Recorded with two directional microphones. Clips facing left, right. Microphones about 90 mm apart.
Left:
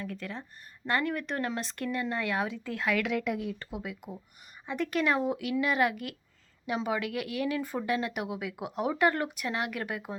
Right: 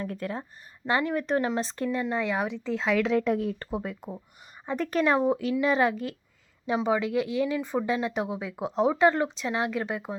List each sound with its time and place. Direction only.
0.0 s speech: 45° right (ahead or behind)
1.0 s speech: 25° right (ahead or behind)
2.0 s speech: 10° right (ahead or behind)